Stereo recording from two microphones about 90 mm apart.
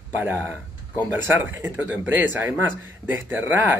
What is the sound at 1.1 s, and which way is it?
Speech, 20° right (ahead or behind).